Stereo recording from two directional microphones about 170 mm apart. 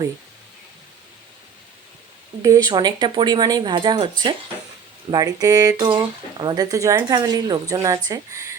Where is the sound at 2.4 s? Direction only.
20° right (ahead or behind).